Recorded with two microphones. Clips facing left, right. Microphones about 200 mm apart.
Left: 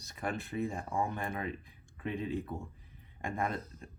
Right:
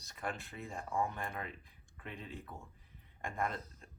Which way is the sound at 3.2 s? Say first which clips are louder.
Left 3 dB; 10° left (ahead or behind).